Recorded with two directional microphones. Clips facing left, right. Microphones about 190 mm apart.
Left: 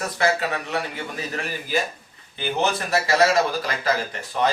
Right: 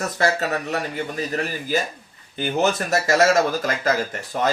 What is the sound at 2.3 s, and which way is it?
Speech, 45° right (ahead or behind).